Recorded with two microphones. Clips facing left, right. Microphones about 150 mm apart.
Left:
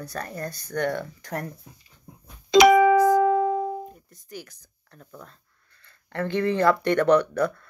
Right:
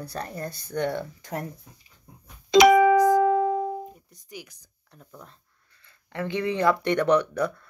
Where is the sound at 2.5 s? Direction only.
90° left.